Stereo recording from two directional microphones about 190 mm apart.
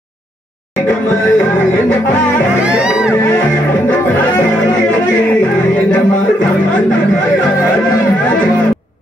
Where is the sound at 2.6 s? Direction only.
5° right (ahead or behind).